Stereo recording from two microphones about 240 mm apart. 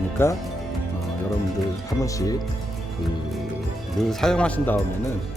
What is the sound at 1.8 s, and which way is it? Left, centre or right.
Speech, centre.